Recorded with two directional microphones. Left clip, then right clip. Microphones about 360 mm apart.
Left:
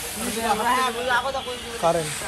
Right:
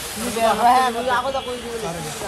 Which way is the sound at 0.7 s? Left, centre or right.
Right.